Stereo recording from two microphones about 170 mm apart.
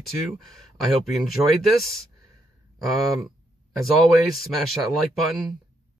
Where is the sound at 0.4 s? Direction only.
Centre (ahead or behind).